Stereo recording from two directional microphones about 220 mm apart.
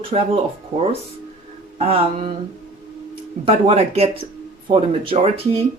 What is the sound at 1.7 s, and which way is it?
Speech, 25° right (ahead or behind).